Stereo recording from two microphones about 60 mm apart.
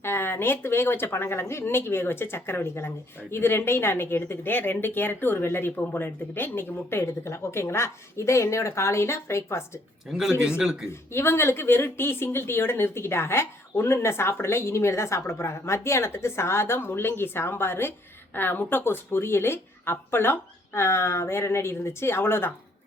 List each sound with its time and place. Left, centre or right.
0.0 s speech: left
10.1 s speech: centre
11.1 s speech: left